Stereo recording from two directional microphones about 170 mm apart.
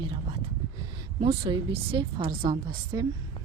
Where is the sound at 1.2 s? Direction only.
30° right (ahead or behind).